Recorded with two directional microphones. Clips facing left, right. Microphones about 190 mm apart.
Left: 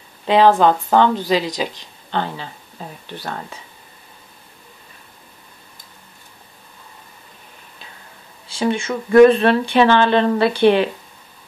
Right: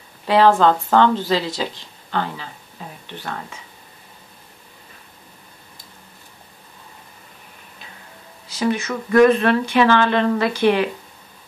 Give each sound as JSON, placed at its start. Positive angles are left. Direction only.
{"t": 0.3, "sound": "a woman's voice", "side_deg": 20}
{"t": 2.8, "sound": "a sound", "side_deg": 35}
{"t": 8.5, "sound": "speech", "side_deg": 30}